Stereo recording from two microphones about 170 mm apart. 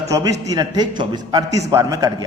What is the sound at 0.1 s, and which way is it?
A man's voice, 20° right (ahead or behind).